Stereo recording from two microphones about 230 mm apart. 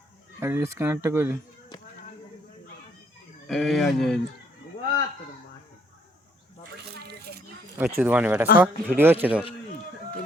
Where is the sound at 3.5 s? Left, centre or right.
Centre.